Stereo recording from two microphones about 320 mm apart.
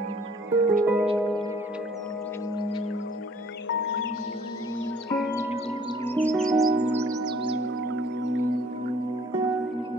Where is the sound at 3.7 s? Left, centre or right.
Left.